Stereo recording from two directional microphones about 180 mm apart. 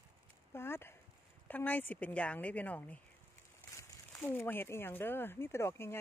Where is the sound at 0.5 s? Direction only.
15° left (ahead or behind).